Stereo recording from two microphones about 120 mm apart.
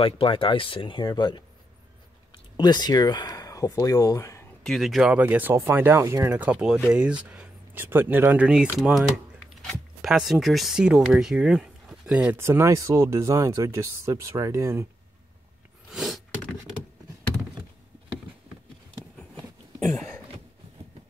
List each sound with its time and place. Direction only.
0.0 s speech: 45° left (ahead or behind); by 4.5 s 25° left (ahead or behind)
4.6 s speech: centre (ahead or behind)
5.2 s speech: 15° right (ahead or behind)
12.4 s speech: 20° right (ahead or behind)
15.9 s a sound: centre (ahead or behind)